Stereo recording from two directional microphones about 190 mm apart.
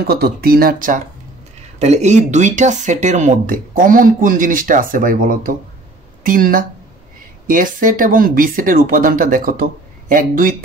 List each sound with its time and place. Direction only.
0.0 s speech: 55° right (ahead or behind)